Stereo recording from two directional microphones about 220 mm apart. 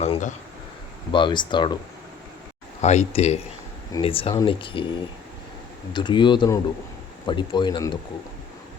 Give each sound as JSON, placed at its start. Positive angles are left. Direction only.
{"t": 0.0, "sound": "speech", "side_deg": 30}
{"t": 1.1, "sound": "speech", "side_deg": 20}
{"t": 2.8, "sound": "speech", "side_deg": 30}
{"t": 5.9, "sound": "speech", "side_deg": 20}